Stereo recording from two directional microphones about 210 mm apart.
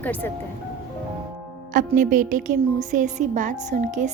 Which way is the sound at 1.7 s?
40° right (ahead or behind).